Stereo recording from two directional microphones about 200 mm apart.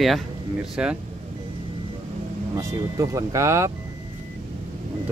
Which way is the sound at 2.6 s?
15° right (ahead or behind).